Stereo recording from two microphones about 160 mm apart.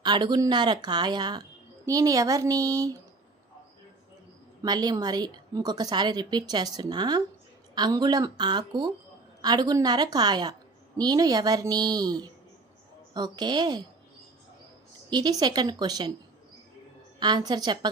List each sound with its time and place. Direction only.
0.0 s a woman's voice: 25° right (ahead or behind)
4.6 s a woman's voice: 25° right (ahead or behind)
15.1 s a woman's voice: 25° right (ahead or behind)
17.2 s a woman's voice: 25° right (ahead or behind)